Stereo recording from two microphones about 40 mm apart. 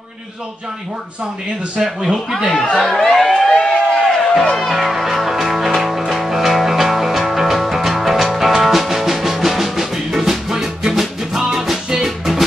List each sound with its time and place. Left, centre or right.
1.8 s speech: centre
2.8 s speech: centre
3.4 s a sound: centre
4.0 s music: centre